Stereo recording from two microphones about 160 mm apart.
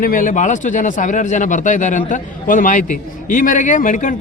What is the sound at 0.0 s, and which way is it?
A man's voice, 55° left (ahead or behind).